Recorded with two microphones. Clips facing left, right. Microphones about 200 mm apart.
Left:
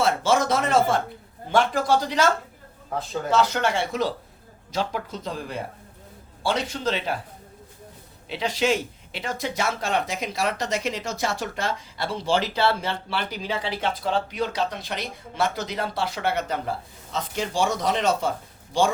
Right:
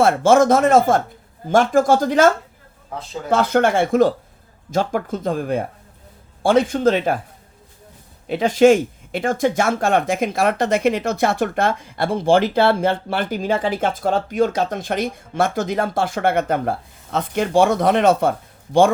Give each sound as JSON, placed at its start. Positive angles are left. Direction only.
{"t": 0.0, "sound": "speech", "side_deg": -50}
{"t": 8.3, "sound": "speech", "side_deg": -50}